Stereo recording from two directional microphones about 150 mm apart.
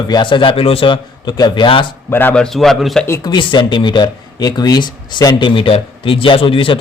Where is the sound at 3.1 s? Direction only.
30° left (ahead or behind).